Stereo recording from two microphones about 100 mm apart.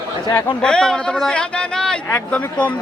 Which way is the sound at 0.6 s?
5° left (ahead or behind).